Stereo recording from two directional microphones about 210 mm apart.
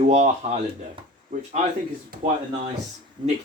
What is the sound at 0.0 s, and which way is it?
Speech, 30° right (ahead or behind).